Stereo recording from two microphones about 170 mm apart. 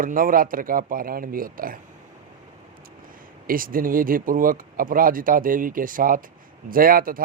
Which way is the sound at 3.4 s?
55° right (ahead or behind).